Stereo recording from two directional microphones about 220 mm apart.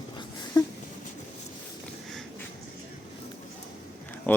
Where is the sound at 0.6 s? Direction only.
20° left (ahead or behind).